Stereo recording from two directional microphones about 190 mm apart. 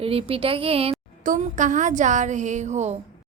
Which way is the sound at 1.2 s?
40° right (ahead or behind).